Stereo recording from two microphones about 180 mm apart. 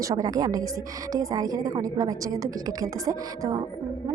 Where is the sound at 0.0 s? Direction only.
20° right (ahead or behind).